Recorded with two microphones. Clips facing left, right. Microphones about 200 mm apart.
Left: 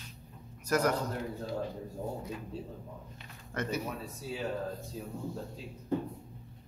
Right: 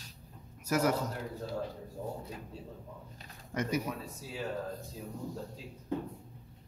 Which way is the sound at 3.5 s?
10° right (ahead or behind).